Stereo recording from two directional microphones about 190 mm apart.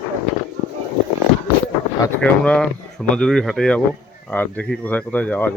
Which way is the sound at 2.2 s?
5° left (ahead or behind).